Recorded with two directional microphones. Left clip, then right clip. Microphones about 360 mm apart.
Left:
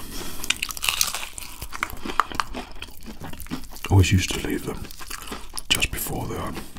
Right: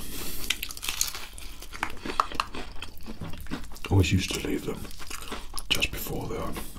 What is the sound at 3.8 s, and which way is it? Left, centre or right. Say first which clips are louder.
Crunch: left 4 dB; left.